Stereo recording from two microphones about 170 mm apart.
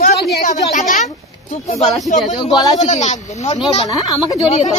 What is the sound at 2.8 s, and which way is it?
Speech, 40° left (ahead or behind).